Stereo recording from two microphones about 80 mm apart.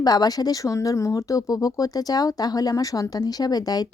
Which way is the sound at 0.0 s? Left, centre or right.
Left.